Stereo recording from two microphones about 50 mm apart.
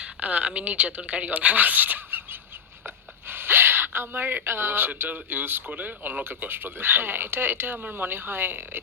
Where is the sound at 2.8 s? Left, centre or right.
Right.